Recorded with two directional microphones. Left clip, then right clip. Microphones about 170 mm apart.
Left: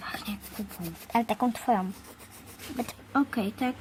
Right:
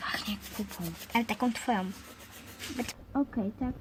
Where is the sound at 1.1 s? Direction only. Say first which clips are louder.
Left 3 dB; 35° left (ahead or behind).